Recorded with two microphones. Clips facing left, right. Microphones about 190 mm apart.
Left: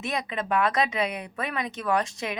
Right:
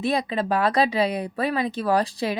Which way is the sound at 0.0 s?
35° right (ahead or behind).